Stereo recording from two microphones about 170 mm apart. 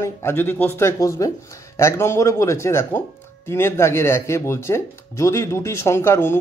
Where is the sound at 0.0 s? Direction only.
15° left (ahead or behind).